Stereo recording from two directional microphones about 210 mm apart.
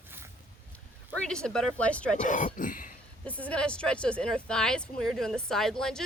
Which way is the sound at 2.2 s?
35° left (ahead or behind).